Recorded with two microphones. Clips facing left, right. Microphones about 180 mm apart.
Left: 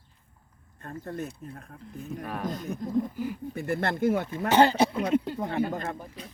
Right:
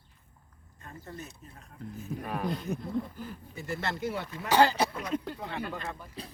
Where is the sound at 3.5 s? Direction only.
55° left (ahead or behind).